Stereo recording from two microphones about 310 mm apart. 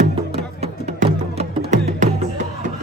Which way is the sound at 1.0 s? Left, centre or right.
Centre.